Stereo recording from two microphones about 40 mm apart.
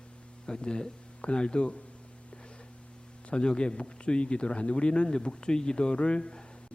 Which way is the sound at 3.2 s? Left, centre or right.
Left.